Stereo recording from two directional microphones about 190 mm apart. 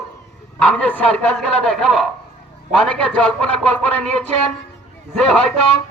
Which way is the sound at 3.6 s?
5° left (ahead or behind).